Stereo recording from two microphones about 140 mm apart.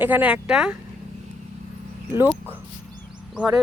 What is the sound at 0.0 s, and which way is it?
Speech, 10° right (ahead or behind).